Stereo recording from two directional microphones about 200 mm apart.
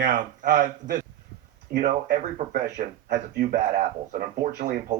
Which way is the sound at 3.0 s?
55° right (ahead or behind).